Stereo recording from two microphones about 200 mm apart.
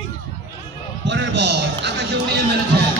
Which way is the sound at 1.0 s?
65° right (ahead or behind).